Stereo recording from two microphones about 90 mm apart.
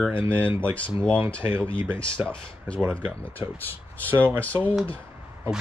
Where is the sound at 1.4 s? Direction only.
25° right (ahead or behind).